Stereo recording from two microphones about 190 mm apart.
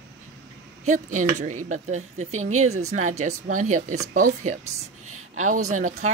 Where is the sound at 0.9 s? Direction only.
40° right (ahead or behind).